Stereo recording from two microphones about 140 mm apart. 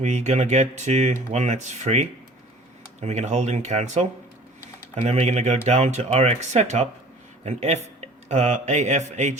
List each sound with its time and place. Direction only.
0.0 s speech: 55° right (ahead or behind)